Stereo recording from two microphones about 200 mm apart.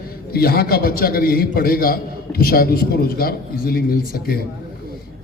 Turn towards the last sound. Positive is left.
turn(degrees=50)  # may be behind; listen again after turning